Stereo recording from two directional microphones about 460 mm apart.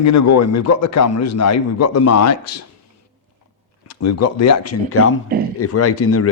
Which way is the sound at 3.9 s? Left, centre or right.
Left.